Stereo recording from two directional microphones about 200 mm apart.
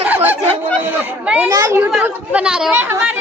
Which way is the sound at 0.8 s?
10° right (ahead or behind).